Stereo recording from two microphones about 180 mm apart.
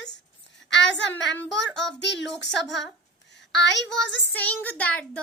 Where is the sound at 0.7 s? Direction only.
80° left.